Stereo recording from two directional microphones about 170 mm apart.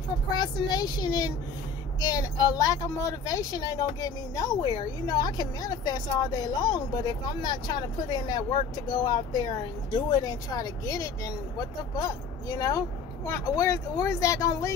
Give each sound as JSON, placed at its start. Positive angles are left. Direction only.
{"t": 0.4, "sound": "speech", "side_deg": 25}